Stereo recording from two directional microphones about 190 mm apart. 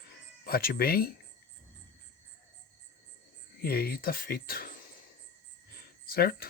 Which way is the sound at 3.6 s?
55° left (ahead or behind).